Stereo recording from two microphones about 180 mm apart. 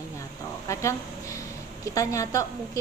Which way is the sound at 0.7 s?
15° left (ahead or behind).